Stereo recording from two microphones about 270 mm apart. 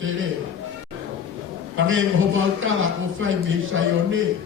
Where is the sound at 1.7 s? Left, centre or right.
Right.